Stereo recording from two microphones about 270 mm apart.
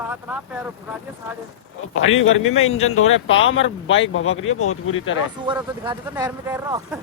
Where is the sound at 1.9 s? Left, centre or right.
Left.